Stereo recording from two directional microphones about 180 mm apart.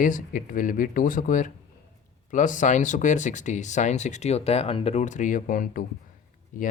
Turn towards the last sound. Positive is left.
turn(degrees=45)  # may be behind; listen again after turning